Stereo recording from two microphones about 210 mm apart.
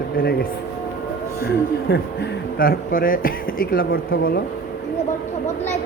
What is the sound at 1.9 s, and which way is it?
Speech, 45° left (ahead or behind).